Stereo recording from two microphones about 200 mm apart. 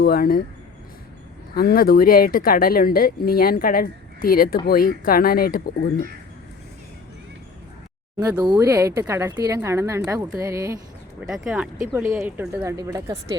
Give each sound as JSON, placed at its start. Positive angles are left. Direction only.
{"t": 0.0, "sound": "speech", "side_deg": 50}
{"t": 1.5, "sound": "speech", "side_deg": 50}
{"t": 8.2, "sound": "a woman's voice", "side_deg": -15}
{"t": 11.2, "sound": "a woman's voice", "side_deg": -5}